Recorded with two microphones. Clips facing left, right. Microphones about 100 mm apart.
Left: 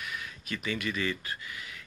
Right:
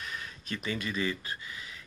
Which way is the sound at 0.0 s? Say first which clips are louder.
Left 1 dB; 35° right (ahead or behind).